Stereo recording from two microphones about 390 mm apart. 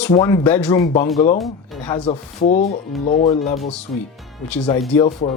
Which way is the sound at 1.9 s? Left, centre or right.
Centre.